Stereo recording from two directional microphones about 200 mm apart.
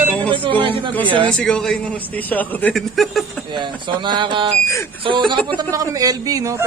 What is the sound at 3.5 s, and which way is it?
A man's voice, 25° right (ahead or behind).